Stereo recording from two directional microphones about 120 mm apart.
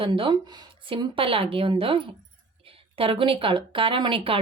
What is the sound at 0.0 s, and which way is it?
Speech, 45° right (ahead or behind).